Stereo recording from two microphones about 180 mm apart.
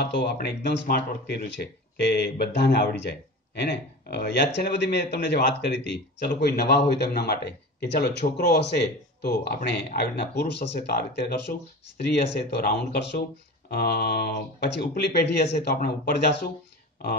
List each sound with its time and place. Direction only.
0.0 s speech: 65° left (ahead or behind)